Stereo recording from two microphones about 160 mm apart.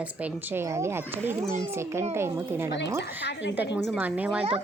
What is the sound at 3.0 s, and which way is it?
Speech, 90° left.